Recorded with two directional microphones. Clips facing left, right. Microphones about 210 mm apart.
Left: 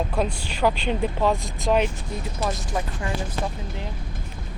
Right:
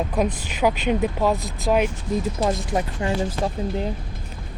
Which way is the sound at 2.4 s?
25° right (ahead or behind).